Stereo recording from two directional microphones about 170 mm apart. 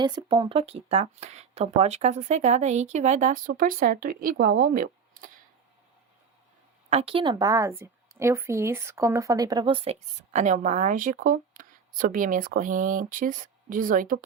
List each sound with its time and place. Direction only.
0.0 s speech: 25° right (ahead or behind); by 5.3 s 55° right (ahead or behind)
6.9 s a woman's voice: 35° right (ahead or behind); by 14.3 s 55° right (ahead or behind)